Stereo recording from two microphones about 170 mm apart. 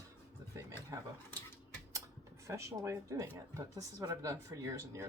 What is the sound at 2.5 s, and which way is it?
Speech, 15° right (ahead or behind).